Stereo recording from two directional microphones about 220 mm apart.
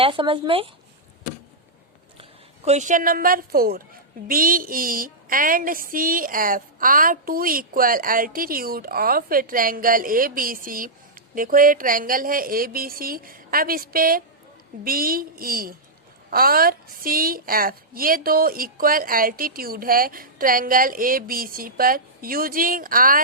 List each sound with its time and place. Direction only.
0.0 s speech: 25° right (ahead or behind)
2.6 s a woman's voice: 35° right (ahead or behind)